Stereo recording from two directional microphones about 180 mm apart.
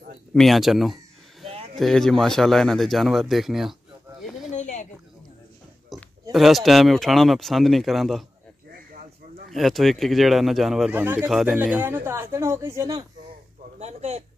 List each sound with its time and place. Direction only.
0.3 s speech: centre (ahead or behind)
4.5 s a sound: 40° left (ahead or behind)
5.9 s a sound: centre (ahead or behind)
6.3 s speech: centre (ahead or behind)
9.5 s speech: centre (ahead or behind); by 13.0 s 20° right (ahead or behind)
13.7 s speech: 40° right (ahead or behind)